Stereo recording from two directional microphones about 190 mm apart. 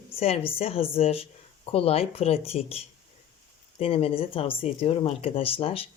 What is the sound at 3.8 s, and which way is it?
Speech, 30° left (ahead or behind).